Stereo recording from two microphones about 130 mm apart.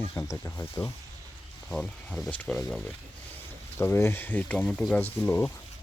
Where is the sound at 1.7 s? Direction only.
Centre (ahead or behind).